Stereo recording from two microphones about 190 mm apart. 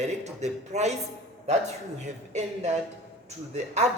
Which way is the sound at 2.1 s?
35° right (ahead or behind).